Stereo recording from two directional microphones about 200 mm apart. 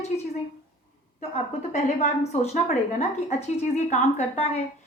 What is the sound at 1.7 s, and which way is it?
A woman's voice, 35° left (ahead or behind).